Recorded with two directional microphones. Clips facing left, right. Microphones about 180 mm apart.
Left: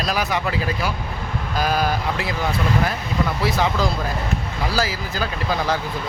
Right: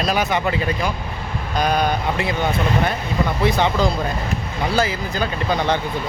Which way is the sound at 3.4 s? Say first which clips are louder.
Right 4 dB; 5° left (ahead or behind).